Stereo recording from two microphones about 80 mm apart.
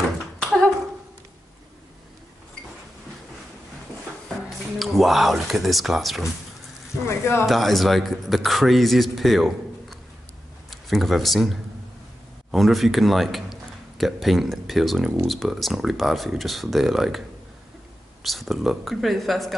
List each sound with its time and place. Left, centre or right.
4.7 s a man's voice: centre
7.1 s speech: left
7.4 s a man's voice: centre
18.2 s a man's voice: centre